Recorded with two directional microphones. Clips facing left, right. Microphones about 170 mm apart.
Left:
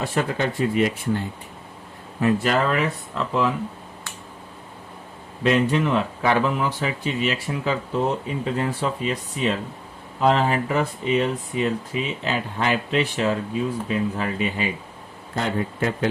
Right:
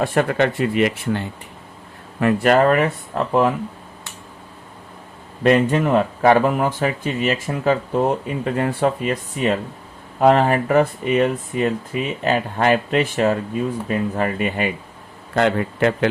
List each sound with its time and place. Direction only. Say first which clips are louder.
0.0 s speech: right 6 dB; 55° right (ahead or behind); by 1.2 s 75° right (ahead or behind)
2.2 s speech: right 5 dB; 55° right (ahead or behind)
5.4 s speech: right 4 dB; 50° right (ahead or behind)
15.4 s speech: right 6 dB; 75° right (ahead or behind)